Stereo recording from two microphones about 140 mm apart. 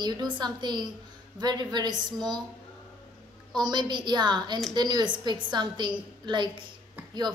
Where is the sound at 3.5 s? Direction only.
30° right (ahead or behind).